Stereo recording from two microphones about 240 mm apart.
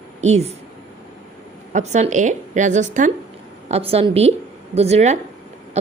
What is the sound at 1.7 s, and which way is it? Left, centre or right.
A woman's voice, right.